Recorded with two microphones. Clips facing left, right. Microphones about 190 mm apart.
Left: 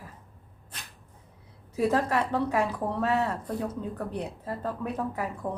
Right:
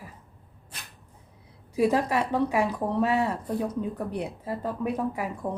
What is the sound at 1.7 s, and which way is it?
A woman's voice, 15° right (ahead or behind).